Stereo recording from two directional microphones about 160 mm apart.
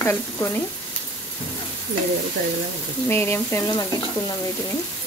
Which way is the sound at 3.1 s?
15° left (ahead or behind).